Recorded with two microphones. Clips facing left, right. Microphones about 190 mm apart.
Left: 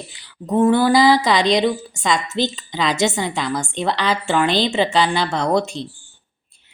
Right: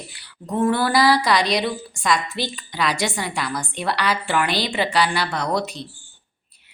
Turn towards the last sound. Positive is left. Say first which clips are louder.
# left 5 dB
turn(degrees=25)  # may be behind; listen again after turning